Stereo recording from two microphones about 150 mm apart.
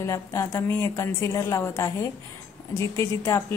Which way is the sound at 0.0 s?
20° left (ahead or behind).